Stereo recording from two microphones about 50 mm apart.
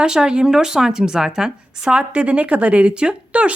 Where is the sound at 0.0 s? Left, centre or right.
Centre.